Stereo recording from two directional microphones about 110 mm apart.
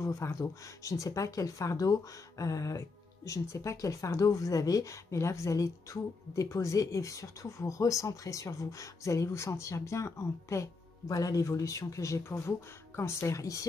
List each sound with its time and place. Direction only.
0.0 s speech: 30° left (ahead or behind)